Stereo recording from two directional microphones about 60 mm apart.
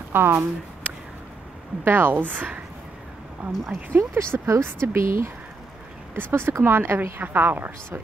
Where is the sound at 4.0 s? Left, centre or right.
Right.